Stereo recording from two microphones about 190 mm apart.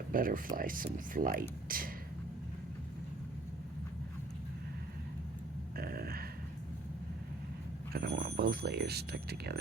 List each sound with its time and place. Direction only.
0.1 s speech: 45° right (ahead or behind)
5.7 s a sound: 50° right (ahead or behind)
7.9 s speech: 55° right (ahead or behind)